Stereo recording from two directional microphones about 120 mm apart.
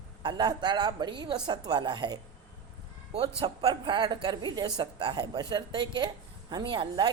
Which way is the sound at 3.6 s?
40° right (ahead or behind).